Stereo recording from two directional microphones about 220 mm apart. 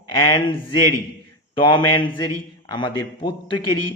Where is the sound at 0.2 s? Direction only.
20° left (ahead or behind).